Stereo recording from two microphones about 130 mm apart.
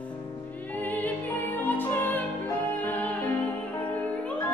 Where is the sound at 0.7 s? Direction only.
15° left (ahead or behind).